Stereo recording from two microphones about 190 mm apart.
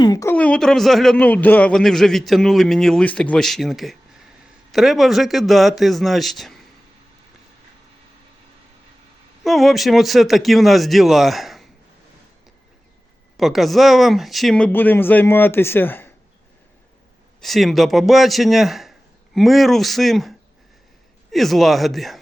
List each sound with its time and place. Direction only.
0.0 s a sound: 20° left (ahead or behind)
0.3 s a man's voice: 5° left (ahead or behind)
9.4 s a man's voice: centre (ahead or behind)
13.3 s speech: centre (ahead or behind)
17.4 s a man's voice: centre (ahead or behind)